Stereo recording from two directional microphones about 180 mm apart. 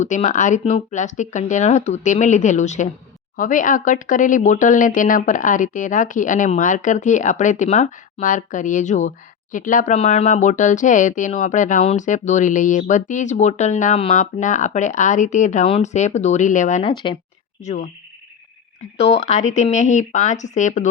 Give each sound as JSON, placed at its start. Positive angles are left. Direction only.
{"t": 0.0, "sound": "speech", "side_deg": 40}
{"t": 16.9, "sound": "speech", "side_deg": 25}
{"t": 18.9, "sound": "speech", "side_deg": 35}